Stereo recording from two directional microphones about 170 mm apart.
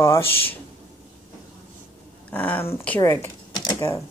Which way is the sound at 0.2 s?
35° left (ahead or behind).